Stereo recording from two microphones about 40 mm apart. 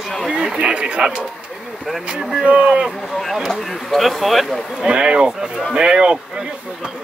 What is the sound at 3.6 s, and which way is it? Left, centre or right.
Speech, centre.